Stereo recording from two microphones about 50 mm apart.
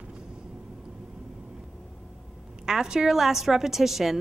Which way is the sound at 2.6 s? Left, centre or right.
Centre.